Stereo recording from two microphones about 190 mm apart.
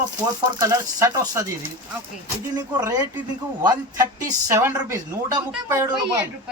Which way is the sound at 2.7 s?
20° right (ahead or behind).